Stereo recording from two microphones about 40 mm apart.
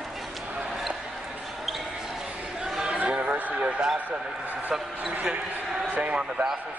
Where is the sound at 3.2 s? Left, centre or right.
Right.